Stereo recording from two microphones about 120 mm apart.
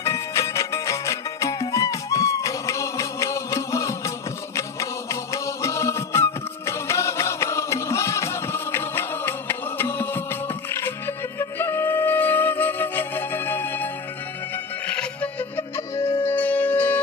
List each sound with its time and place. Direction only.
0.0 s music: 25° left (ahead or behind)